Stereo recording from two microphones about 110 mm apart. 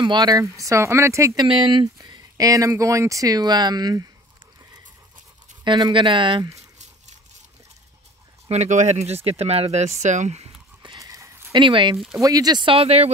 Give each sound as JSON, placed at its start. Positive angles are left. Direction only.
{"t": 0.0, "sound": "speech", "side_deg": -45}
{"t": 0.4, "sound": "speech", "side_deg": -30}
{"t": 1.3, "sound": "speech", "side_deg": -45}
{"t": 2.0, "sound": "speech", "side_deg": -40}
{"t": 5.6, "sound": "speech", "side_deg": -45}
{"t": 8.5, "sound": "speech", "side_deg": -90}
{"t": 11.0, "sound": "a sound", "side_deg": -30}
{"t": 11.5, "sound": "speech", "side_deg": -45}
{"t": 12.2, "sound": "speech", "side_deg": -35}
{"t": 12.7, "sound": "speech", "side_deg": -70}